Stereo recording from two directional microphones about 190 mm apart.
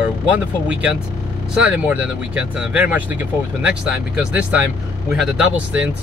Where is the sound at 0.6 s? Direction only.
5° right (ahead or behind).